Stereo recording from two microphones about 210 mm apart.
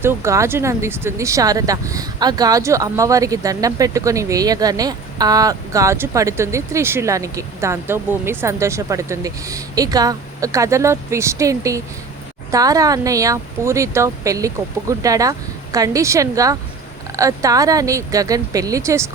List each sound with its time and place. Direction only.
0.0 s speech: 10° right (ahead or behind)